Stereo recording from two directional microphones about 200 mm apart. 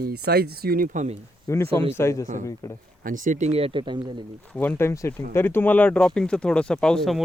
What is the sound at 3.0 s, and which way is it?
Speech, 40° right (ahead or behind).